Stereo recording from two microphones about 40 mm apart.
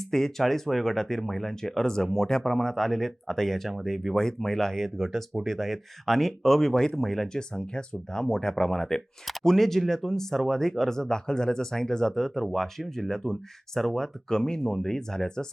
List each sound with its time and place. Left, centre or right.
0.0 s speech: centre
7.3 s speech: centre